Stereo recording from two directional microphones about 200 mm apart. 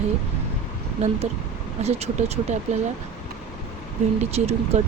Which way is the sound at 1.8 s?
30° right (ahead or behind).